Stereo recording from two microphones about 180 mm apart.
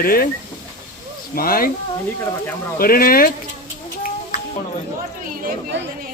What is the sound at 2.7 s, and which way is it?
Speech, 55° left (ahead or behind).